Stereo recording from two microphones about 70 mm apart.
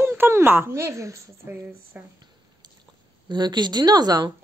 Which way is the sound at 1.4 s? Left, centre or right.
Right.